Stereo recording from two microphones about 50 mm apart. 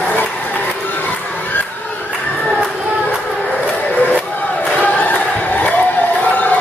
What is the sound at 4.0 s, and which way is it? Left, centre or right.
Crowd, left.